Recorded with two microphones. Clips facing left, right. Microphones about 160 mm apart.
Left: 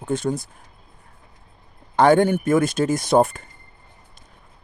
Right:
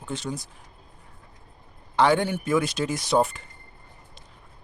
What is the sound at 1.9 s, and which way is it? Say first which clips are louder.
Speech: left 6 dB; 50° left (ahead or behind).